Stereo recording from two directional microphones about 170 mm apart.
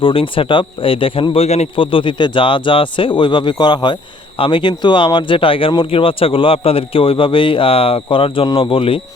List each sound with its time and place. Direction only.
0.0 s speech: 30° left (ahead or behind)